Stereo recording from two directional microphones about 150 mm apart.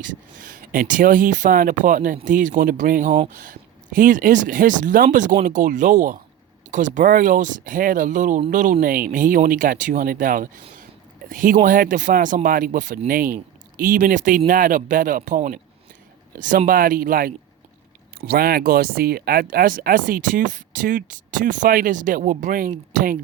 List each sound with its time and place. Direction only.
0.0 s speech: 60° right (ahead or behind)
8.8 s speech: 70° right (ahead or behind)
18.3 s speech: 90° right; by 23.1 s 60° right (ahead or behind)